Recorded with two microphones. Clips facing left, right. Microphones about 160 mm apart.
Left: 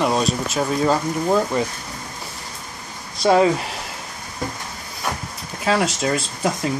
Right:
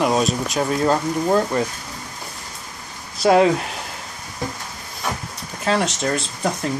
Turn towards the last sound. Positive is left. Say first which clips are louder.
# left 1 dB
turn(degrees=5)  # may be behind; listen again after turning